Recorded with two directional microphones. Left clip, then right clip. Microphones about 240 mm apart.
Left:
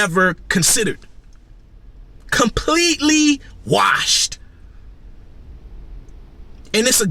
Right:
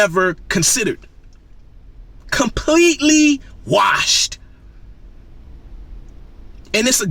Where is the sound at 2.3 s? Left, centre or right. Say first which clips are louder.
Right 1 dB; centre.